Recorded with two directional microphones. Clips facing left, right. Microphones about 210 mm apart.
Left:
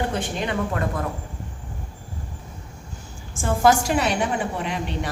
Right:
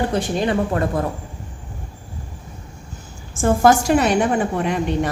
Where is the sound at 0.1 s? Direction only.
35° right (ahead or behind).